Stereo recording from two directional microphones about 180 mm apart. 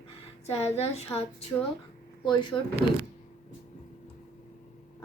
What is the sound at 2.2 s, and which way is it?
Speech, 25° left (ahead or behind).